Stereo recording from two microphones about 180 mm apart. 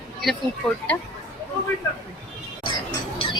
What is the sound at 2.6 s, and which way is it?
Music, 30° left (ahead or behind).